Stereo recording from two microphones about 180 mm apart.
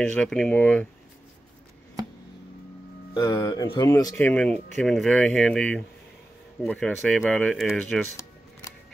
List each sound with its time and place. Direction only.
0.0 s speech: 5° left (ahead or behind)
3.2 s speech: 20° left (ahead or behind)
4.2 s speech: 5° left (ahead or behind)